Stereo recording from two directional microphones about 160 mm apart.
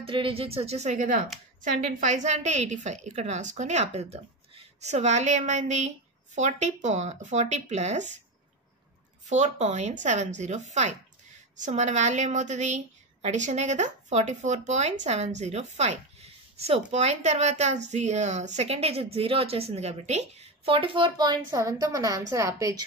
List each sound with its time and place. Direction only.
0.0 s a woman's voice: 35° right (ahead or behind)
9.2 s a woman's voice: 45° right (ahead or behind); by 22.8 s 20° right (ahead or behind)